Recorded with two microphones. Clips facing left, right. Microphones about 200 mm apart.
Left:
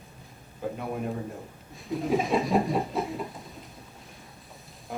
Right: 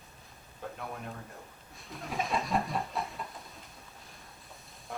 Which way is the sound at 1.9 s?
Centre (ahead or behind).